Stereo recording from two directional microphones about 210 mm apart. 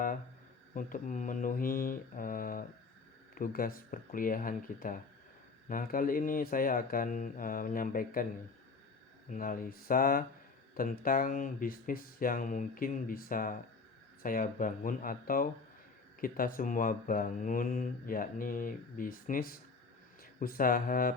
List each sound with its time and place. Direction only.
0.7 s speech: 40° left (ahead or behind)
9.3 s speech: 40° left (ahead or behind)